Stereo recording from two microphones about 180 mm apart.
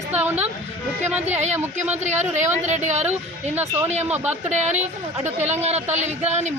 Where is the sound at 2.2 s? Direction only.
40° right (ahead or behind).